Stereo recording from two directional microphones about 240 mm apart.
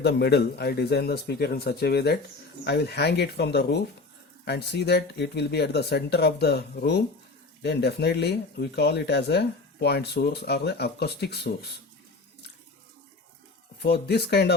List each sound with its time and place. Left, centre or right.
0.0 s speech: left
13.8 s speech: left